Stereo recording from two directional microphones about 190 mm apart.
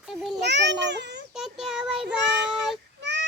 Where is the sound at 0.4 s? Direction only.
65° right (ahead or behind).